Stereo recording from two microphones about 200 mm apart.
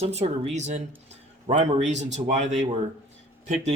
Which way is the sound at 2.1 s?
35° right (ahead or behind).